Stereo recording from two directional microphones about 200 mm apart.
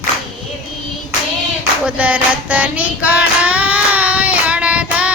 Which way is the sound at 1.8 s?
5° right (ahead or behind).